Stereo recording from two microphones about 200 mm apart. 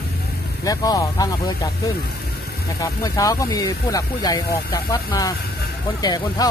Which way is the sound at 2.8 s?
15° left (ahead or behind).